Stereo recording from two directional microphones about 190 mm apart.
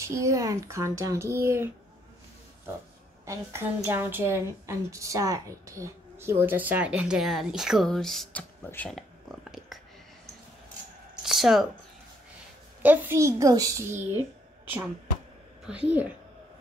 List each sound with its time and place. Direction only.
0.0 s a woman's voice: 15° right (ahead or behind)
3.3 s a woman's voice: 10° right (ahead or behind)
11.2 s a sound: centre (ahead or behind)
12.8 s a woman's voice: 10° right (ahead or behind)
15.6 s a woman's voice: 5° right (ahead or behind)